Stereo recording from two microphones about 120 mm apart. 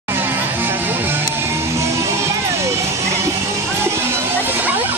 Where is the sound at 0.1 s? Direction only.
15° right (ahead or behind).